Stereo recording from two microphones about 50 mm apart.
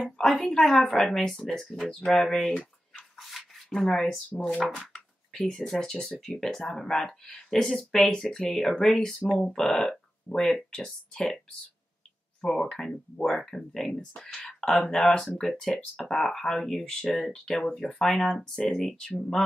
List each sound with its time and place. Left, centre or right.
0.0 s speech: centre
4.4 s speech: centre
4.7 s a sound: centre
5.6 s speech: centre
15.7 s speech: left
16.1 s speech: centre